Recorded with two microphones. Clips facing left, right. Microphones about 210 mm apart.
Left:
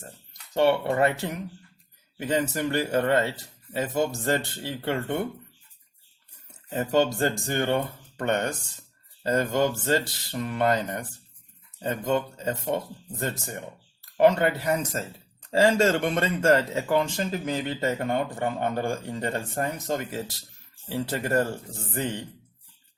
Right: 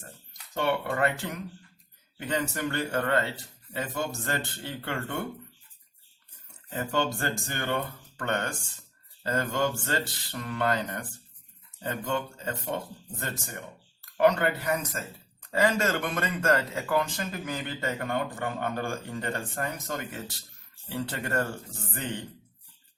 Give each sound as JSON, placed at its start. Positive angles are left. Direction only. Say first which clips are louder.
{"t": 0.9, "sound": "speech", "louder": "left 4 dB", "side_deg": 20}
{"t": 6.7, "sound": "speech", "louder": "left 6 dB", "side_deg": 20}